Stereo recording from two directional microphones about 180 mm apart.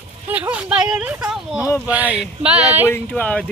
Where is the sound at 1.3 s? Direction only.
Centre (ahead or behind).